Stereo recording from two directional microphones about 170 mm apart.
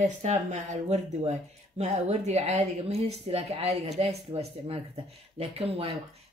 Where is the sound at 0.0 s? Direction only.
45° right (ahead or behind).